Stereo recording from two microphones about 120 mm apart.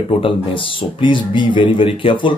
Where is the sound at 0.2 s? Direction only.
45° left (ahead or behind).